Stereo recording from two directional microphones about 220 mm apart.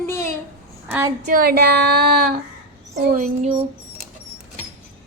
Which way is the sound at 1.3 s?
40° right (ahead or behind).